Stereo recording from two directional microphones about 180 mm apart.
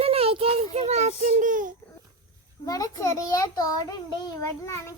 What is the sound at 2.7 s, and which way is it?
A child's voice, 20° left (ahead or behind).